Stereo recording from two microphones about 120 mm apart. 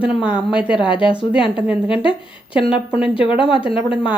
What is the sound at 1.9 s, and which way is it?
Speech, 45° left (ahead or behind).